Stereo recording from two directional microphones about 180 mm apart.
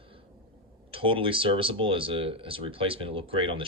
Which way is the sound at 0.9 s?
30° right (ahead or behind).